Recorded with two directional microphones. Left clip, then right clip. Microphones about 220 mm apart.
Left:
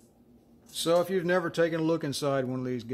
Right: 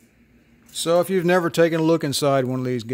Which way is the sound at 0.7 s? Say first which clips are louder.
Right 6 dB; 35° right (ahead or behind).